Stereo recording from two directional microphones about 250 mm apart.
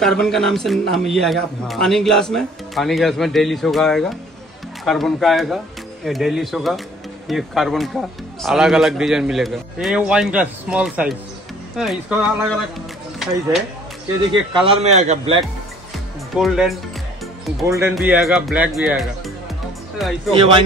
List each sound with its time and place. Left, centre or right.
0.0 s a man's voice: centre
14.5 s a man's voice: right
16.3 s a man's voice: centre
17.6 s a man's voice: centre
20.3 s a man's voice: centre